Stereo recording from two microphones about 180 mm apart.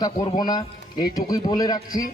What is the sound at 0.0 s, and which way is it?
A man's voice, 20° left (ahead or behind).